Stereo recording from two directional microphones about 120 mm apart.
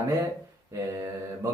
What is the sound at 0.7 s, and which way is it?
Speech, 25° right (ahead or behind).